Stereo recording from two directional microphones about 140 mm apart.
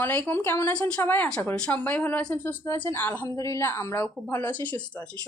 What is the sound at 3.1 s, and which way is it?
A woman's voice, 25° left (ahead or behind).